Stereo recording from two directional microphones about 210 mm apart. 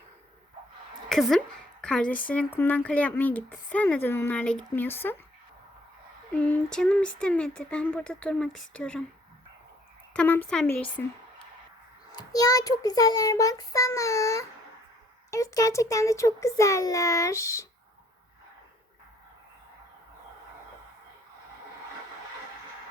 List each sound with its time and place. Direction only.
1.1 s a woman's voice: centre (ahead or behind)
6.3 s speech: 5° left (ahead or behind)
10.1 s a woman's voice: 5° left (ahead or behind)
12.1 s a woman's voice: 15° left (ahead or behind)